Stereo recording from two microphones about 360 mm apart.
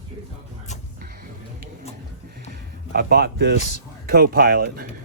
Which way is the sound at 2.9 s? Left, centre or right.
Right.